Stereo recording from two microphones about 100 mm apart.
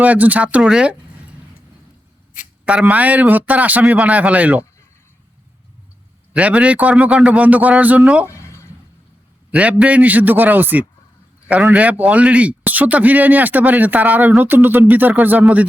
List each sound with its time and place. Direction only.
0.0 s a man's voice: 15° right (ahead or behind)
2.6 s a man's voice: 15° right (ahead or behind)
6.3 s a man's voice: 15° right (ahead or behind)
9.5 s a man's voice: 15° right (ahead or behind)